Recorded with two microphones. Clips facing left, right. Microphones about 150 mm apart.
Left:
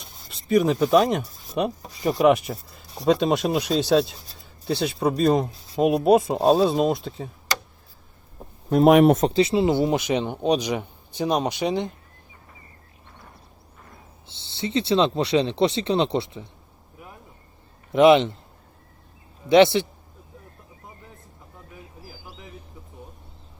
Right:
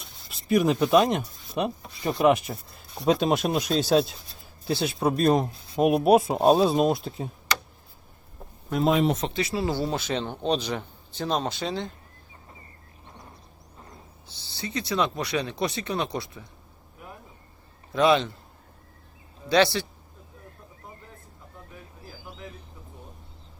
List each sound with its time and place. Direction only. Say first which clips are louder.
0.3 s speech: left 2 dB; centre (ahead or behind)
8.9 s speech: left 8 dB; 70° left (ahead or behind)
9.3 s speech: left 8 dB; 25° left (ahead or behind)
14.3 s speech: left 6 dB; 25° left (ahead or behind)
17.9 s speech: left 6 dB; 20° left (ahead or behind)
19.5 s speech: left 6 dB; 20° left (ahead or behind)